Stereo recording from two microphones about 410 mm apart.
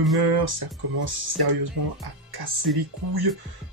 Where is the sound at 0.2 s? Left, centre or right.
Right.